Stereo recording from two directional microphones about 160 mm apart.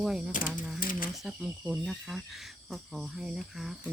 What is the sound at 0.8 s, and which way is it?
Speech, 60° left (ahead or behind).